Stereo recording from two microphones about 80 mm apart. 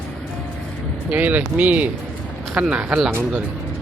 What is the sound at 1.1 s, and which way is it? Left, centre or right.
Mantra, right.